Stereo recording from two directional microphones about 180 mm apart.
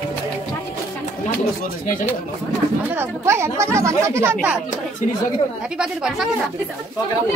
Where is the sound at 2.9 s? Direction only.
15° right (ahead or behind).